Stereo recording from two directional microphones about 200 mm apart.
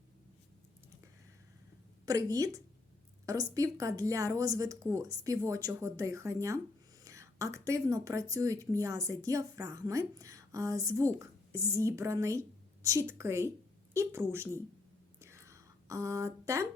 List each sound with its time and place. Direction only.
2.0 s speech: 15° right (ahead or behind)
15.2 s whispering: 15° right (ahead or behind)